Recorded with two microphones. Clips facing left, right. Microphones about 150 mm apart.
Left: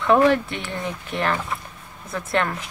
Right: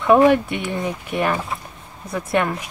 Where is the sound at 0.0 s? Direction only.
15° right (ahead or behind).